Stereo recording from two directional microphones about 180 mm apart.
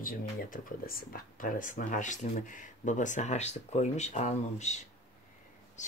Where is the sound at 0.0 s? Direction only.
50° left (ahead or behind).